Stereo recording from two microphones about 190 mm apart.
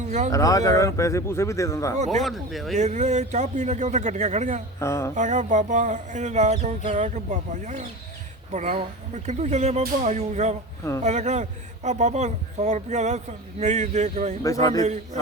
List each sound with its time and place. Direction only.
0.0 s speech: 40° right (ahead or behind)
0.3 s speech: 15° left (ahead or behind)
2.2 s speech: centre (ahead or behind)
2.7 s a man's voice: 40° right (ahead or behind)
4.8 s speech: 15° left (ahead or behind)
5.1 s a man's voice: 40° right (ahead or behind)
14.4 s speech: 15° left (ahead or behind)